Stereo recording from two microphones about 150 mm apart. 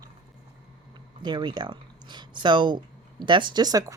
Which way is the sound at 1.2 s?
30° right (ahead or behind).